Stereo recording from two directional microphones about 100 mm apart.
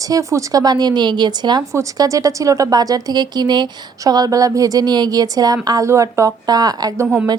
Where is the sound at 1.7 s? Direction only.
35° right (ahead or behind).